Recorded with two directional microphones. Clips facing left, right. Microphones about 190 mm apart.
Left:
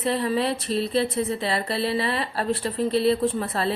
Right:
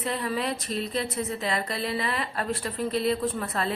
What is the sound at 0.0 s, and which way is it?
A woman's voice, 30° left (ahead or behind).